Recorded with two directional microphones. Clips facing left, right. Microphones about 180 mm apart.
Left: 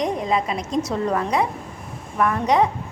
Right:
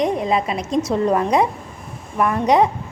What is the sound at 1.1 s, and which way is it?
A woman's voice, 20° right (ahead or behind).